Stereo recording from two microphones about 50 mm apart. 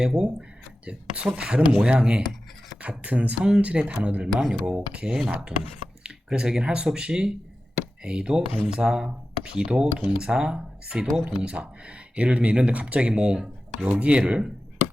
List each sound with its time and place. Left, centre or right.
0.0 s speech: centre
2.8 s speech: right
6.3 s speech: centre